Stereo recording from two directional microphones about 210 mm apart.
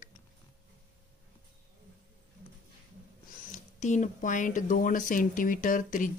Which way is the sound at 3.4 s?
35° left (ahead or behind).